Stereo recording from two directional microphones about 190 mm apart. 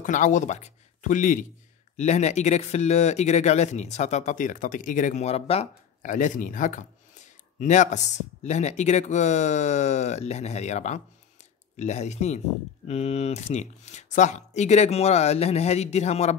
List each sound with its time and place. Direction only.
0.0 s speech: 40° left (ahead or behind)